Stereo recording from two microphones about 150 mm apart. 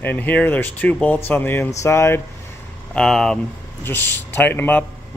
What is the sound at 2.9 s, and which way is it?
Speech, 5° left (ahead or behind).